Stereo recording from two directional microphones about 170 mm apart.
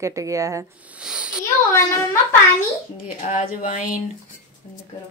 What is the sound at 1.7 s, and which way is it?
Speech, 15° left (ahead or behind).